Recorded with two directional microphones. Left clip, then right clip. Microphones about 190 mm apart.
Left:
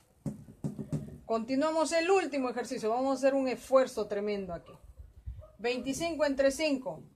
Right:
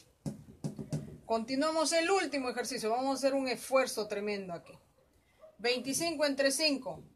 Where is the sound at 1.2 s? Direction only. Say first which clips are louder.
Left 1 dB; 45° left (ahead or behind).